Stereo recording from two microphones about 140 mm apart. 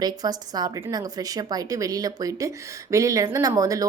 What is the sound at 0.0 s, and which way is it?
A woman's voice, 30° right (ahead or behind).